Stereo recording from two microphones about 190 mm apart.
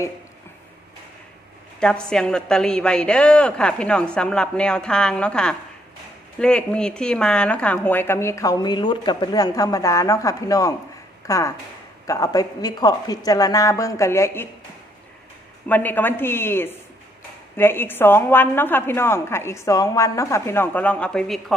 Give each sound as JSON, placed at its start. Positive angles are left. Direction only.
{"t": 1.8, "sound": "a woman's voice", "side_deg": 5}
{"t": 15.7, "sound": "speech", "side_deg": 10}